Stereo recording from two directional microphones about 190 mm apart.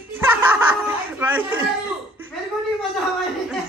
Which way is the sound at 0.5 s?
10° right (ahead or behind).